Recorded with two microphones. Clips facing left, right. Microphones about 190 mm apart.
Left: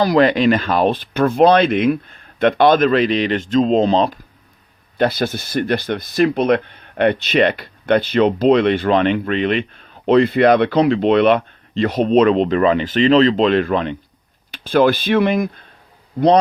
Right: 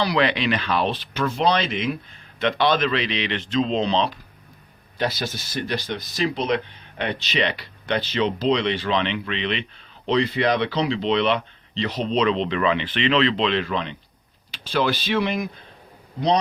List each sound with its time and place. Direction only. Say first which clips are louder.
0.0 s speech: left 8 dB; 45° left (ahead or behind)
4.9 s speech: left 8 dB; 55° left (ahead or behind)